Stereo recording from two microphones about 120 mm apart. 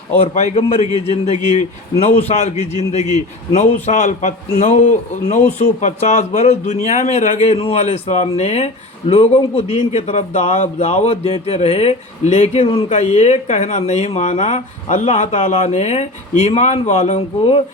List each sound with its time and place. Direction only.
0.2 s a man's voice: 65° left (ahead or behind)